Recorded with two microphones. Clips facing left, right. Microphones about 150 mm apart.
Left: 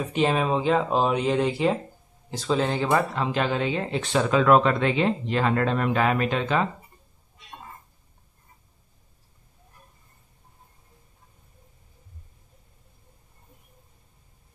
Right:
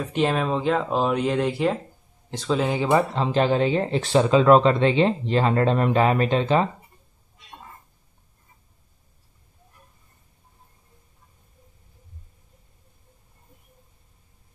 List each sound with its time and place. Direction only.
0.0 s speech: centre (ahead or behind)
3.2 s speech: 30° right (ahead or behind)